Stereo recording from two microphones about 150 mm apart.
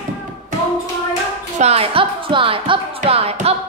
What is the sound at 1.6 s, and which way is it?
Speech, 40° right (ahead or behind).